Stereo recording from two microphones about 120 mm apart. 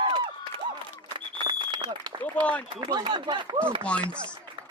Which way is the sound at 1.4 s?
40° right (ahead or behind).